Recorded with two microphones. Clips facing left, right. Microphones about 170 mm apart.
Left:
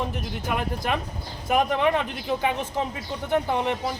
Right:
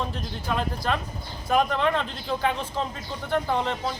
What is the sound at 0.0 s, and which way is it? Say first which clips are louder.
A man's voice: left 2 dB; 15° left (ahead or behind).